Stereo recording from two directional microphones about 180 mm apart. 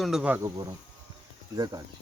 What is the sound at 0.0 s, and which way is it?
Speech, 5° right (ahead or behind).